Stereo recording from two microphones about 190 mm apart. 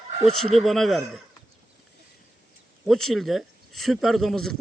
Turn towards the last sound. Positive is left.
turn(degrees=0)  # may be behind; listen again after turning